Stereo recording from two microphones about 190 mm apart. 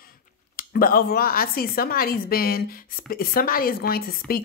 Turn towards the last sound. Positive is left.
turn(degrees=50)  # may be behind; listen again after turning